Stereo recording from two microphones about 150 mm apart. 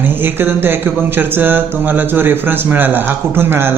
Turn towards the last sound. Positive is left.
turn(degrees=-15)  # may be behind; listen again after turning